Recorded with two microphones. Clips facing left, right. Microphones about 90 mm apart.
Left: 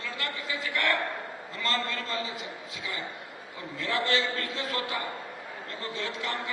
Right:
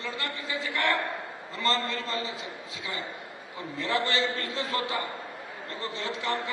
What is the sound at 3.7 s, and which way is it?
A man's voice, 35° right (ahead or behind).